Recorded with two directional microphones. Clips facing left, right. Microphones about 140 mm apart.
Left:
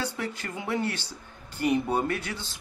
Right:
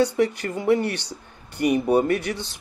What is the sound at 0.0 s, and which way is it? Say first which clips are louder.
Speech: right 12 dB; 15° right (ahead or behind).